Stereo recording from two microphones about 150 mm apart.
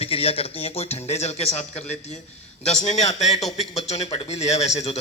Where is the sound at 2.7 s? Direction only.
45° left (ahead or behind).